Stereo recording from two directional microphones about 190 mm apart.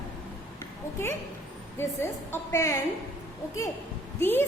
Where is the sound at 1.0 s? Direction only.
15° left (ahead or behind).